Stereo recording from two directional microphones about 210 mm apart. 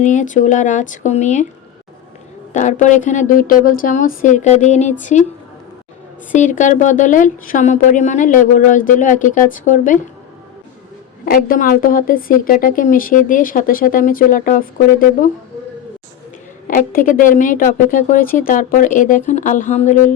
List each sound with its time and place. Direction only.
0.0 s speech: 35° left (ahead or behind)
2.5 s speech: 35° left (ahead or behind)
6.3 s speech: 35° left (ahead or behind)
11.3 s speech: 40° left (ahead or behind)
16.6 s speech: 40° left (ahead or behind)